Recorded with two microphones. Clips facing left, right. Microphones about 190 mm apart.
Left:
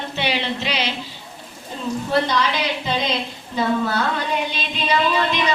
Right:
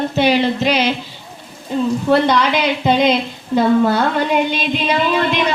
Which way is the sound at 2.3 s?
60° right (ahead or behind).